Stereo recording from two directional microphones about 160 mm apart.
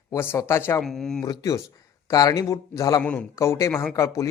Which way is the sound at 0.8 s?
Centre (ahead or behind).